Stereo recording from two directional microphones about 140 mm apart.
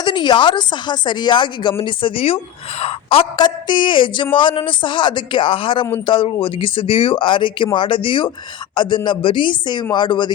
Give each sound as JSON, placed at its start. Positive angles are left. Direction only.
{"t": 0.0, "sound": "speech", "side_deg": 35}